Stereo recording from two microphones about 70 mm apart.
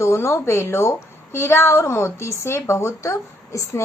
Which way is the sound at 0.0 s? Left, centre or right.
Left.